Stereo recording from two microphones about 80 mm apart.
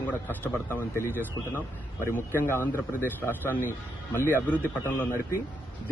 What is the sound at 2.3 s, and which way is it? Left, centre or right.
A man's voice, left.